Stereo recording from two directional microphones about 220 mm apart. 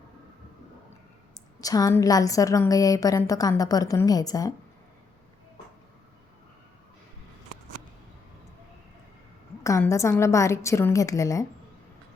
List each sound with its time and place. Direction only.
1.6 s a woman's voice: 15° left (ahead or behind)
9.6 s a woman's voice: 15° left (ahead or behind)